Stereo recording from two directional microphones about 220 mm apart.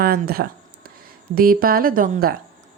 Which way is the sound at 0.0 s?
45° right (ahead or behind).